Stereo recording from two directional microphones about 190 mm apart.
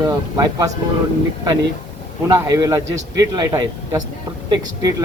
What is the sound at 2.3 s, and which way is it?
A man's voice, 20° right (ahead or behind).